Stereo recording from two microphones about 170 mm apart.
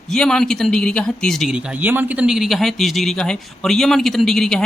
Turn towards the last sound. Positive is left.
turn(degrees=5)  # may be behind; listen again after turning